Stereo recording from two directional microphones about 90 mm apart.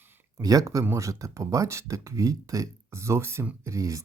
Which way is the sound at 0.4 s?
40° right (ahead or behind).